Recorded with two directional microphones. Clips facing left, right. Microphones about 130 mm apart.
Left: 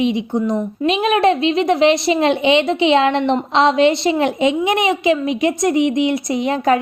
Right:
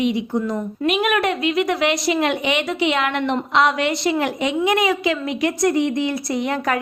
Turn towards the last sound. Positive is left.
turn(degrees=25)  # may be behind; listen again after turning